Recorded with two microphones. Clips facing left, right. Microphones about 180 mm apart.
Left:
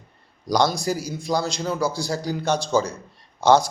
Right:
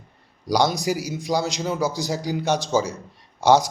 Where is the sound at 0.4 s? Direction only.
15° right (ahead or behind).